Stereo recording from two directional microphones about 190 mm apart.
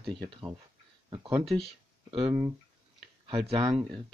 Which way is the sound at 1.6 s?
30° right (ahead or behind).